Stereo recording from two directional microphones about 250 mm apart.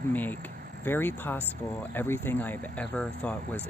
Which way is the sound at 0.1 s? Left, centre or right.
Centre.